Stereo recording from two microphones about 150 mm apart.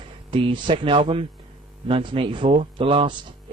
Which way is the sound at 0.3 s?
35° right (ahead or behind).